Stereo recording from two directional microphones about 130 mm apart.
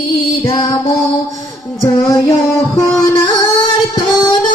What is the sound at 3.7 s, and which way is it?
Music, 35° left (ahead or behind).